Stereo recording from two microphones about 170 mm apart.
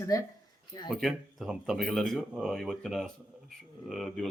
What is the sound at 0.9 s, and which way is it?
Speech, 5° right (ahead or behind).